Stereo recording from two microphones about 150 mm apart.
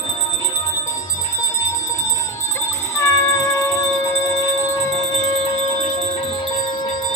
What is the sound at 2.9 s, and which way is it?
Cat, 20° left (ahead or behind).